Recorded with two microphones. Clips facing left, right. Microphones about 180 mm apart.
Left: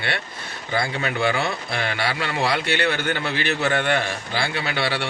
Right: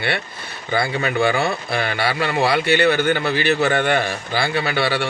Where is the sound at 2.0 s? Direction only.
60° right (ahead or behind).